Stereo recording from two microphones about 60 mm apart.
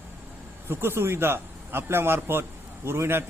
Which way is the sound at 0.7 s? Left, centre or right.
Right.